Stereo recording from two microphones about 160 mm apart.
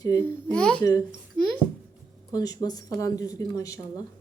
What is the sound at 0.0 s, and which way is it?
Speech, 20° left (ahead or behind).